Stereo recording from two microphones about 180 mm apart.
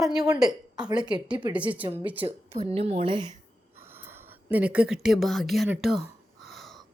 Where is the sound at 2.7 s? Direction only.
35° right (ahead or behind).